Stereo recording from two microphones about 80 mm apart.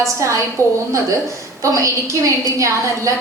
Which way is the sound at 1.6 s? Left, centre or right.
Right.